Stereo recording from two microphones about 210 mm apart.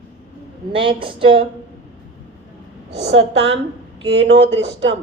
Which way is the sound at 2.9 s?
60° right (ahead or behind).